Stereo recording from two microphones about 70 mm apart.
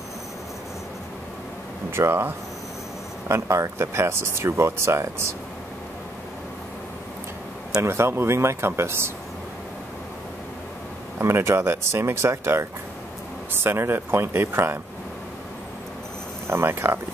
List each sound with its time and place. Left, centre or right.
2.0 s speech: right
7.8 s speech: right
11.1 s speech: right
16.4 s speech: right